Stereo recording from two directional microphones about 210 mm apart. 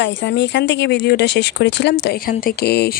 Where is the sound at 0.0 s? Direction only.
55° left (ahead or behind).